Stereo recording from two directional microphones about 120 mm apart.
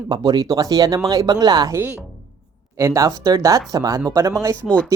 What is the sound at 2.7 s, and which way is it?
Speech, 25° right (ahead or behind).